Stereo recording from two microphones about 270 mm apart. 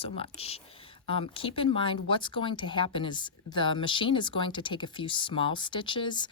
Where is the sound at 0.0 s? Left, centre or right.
Left.